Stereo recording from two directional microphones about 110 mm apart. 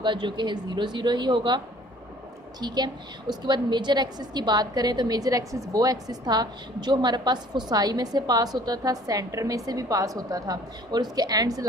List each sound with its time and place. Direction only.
0.0 s speech: 45° right (ahead or behind)
2.6 s a woman's voice: 40° right (ahead or behind)